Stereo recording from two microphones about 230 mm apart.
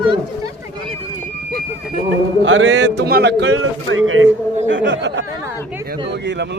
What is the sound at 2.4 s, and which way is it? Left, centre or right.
A man's voice, right.